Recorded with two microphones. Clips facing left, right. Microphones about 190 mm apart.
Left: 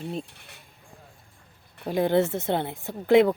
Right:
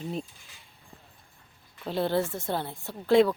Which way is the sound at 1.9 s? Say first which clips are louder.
Left 5 dB; 15° left (ahead or behind).